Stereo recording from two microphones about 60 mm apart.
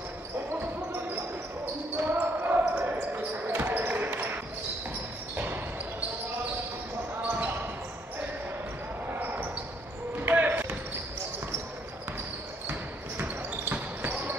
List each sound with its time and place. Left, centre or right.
2.0 s basketball bounce: right
7.2 s basketball bounce: right
9.2 s basketball bounce: right
13.2 s basketball bounce: right